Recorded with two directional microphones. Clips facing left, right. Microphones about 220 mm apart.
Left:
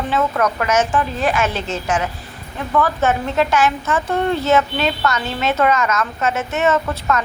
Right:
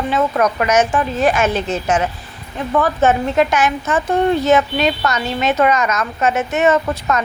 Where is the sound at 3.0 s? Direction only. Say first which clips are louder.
Right 3 dB; 15° right (ahead or behind).